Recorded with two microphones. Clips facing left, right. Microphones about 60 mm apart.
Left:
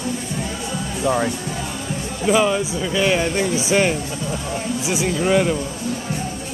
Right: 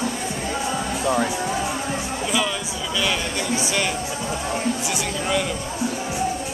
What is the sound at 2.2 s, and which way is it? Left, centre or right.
Speech, left.